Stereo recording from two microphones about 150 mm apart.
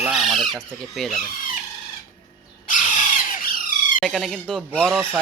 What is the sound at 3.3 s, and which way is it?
Squawk, 70° left (ahead or behind).